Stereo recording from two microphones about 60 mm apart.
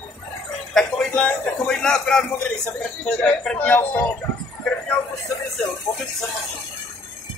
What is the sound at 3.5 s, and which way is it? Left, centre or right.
Speech, left.